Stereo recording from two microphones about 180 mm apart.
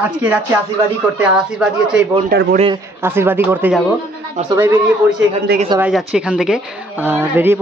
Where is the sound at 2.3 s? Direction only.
60° right (ahead or behind).